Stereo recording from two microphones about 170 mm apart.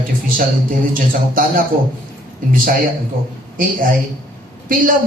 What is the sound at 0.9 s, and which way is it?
Speech, 55° right (ahead or behind).